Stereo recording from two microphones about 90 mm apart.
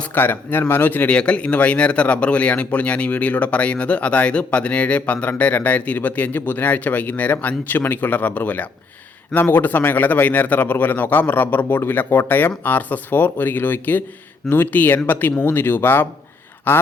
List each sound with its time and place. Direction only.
0.0 s a man's voice: 20° left (ahead or behind)